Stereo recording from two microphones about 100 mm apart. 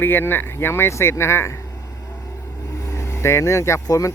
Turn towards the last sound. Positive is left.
turn(degrees=35)  # may be behind; listen again after turning